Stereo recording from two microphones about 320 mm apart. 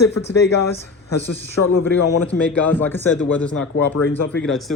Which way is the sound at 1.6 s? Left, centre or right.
Left.